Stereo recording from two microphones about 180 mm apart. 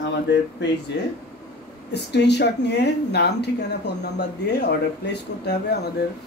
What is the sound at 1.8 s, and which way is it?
Speech, 70° left (ahead or behind).